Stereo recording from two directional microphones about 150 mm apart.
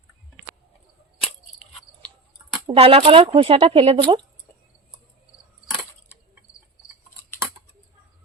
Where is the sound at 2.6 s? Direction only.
40° right (ahead or behind).